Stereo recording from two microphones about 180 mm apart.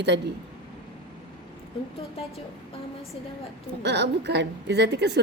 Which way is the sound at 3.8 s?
70° right (ahead or behind).